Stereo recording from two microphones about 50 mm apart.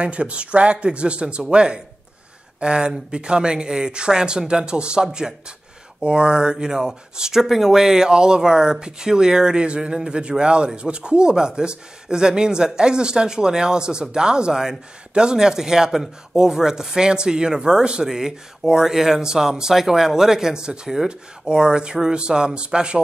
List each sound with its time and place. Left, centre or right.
0.0 s speech: right